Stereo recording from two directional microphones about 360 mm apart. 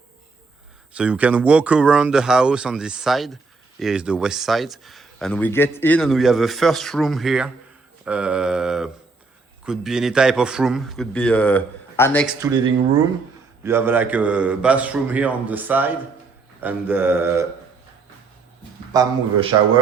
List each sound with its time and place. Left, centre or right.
0.9 s speech: centre
12.4 s a man's voice: centre
18.9 s a man's voice: centre